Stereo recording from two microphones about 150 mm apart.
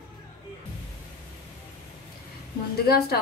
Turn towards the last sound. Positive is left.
turn(degrees=90)